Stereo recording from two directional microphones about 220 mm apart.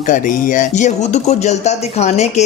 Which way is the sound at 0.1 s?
35° left (ahead or behind).